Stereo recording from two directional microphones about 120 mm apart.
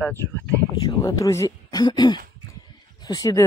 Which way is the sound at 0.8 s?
35° left (ahead or behind).